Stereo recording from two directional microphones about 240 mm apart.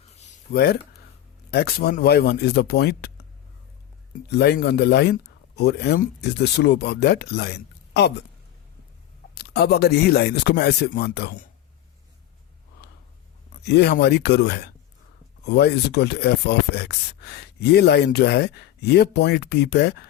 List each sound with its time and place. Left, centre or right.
0.0 s a sound: left
0.5 s speech: left
4.3 s speech: left
9.3 s speech: left
13.7 s speech: left